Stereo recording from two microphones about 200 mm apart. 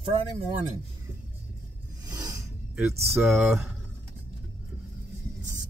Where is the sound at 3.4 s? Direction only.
5° right (ahead or behind).